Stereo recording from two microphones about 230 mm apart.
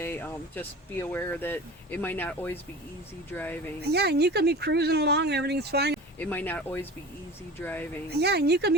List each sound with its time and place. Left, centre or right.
0.0 s speech: centre
3.8 s speech: right
6.1 s speech: centre
8.1 s speech: right